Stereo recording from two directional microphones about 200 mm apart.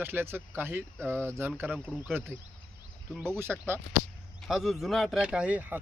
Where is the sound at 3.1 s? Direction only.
10° right (ahead or behind).